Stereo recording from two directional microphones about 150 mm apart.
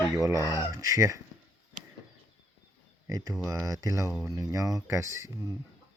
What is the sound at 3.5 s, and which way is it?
Speech, 25° right (ahead or behind).